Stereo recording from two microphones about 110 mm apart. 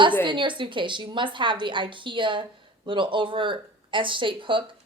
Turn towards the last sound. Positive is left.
turn(degrees=-50)  # may be behind; listen again after turning